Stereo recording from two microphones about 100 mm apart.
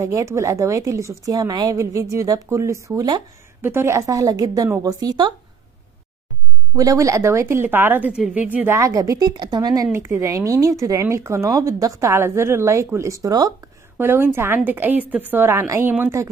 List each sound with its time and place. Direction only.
0.0 s speech: 35° right (ahead or behind)
1.8 s speech: 30° right (ahead or behind)
6.7 s a woman's voice: 35° right (ahead or behind)
8.1 s speech: 10° right (ahead or behind); by 9.8 s 45° right (ahead or behind)
9.9 s speech: 30° right (ahead or behind)
13.9 s a woman's voice: 25° right (ahead or behind)